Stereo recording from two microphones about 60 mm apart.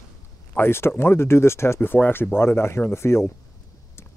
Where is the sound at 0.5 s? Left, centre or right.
Left.